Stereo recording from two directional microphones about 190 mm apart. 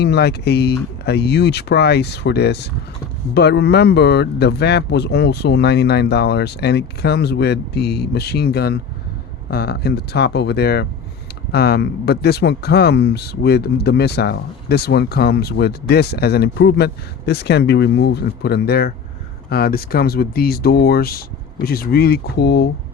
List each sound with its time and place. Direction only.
0.0 s speech: 60° left (ahead or behind)